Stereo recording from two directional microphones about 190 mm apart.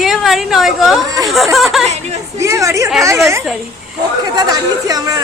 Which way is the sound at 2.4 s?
15° right (ahead or behind).